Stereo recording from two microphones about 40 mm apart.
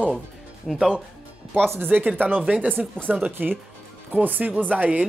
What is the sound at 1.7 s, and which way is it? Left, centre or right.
Speech, right.